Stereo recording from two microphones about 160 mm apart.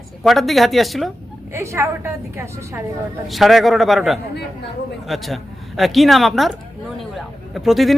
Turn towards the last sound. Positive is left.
turn(degrees=0)  # may be behind; listen again after turning